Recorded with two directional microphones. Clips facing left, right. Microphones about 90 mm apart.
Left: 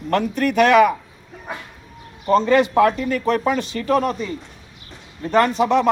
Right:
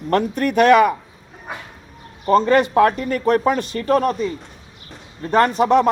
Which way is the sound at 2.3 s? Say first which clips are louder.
Right 1 dB; 45° right (ahead or behind).